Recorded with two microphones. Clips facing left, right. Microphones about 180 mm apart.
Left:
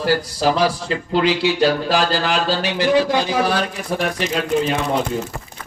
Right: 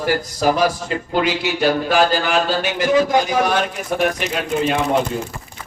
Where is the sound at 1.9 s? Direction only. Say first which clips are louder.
Right 2 dB; 90° left.